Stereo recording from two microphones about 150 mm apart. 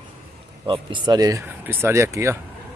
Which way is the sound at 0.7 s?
35° right (ahead or behind).